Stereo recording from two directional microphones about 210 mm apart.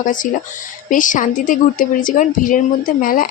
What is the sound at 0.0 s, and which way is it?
A woman's voice, 40° left (ahead or behind).